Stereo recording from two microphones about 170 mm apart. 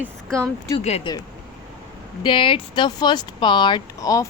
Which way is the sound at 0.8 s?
35° left (ahead or behind).